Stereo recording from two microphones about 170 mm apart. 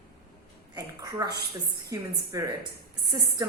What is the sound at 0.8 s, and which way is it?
A woman's voice, 25° right (ahead or behind).